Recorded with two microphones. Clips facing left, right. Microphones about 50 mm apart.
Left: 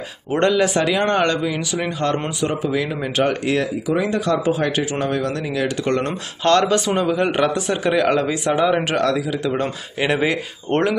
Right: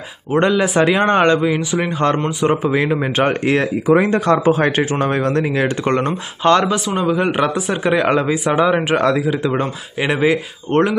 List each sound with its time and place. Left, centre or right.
0.4 s a man's voice: centre
0.8 s a man's voice: right
6.0 s a man's voice: centre
9.9 s a man's voice: centre
10.7 s speech: centre